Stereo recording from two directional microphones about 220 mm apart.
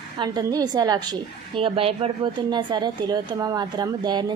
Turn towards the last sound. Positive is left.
turn(degrees=-20)  # may be behind; listen again after turning